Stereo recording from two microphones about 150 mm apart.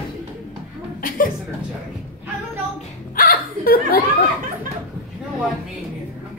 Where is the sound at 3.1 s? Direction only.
75° left (ahead or behind).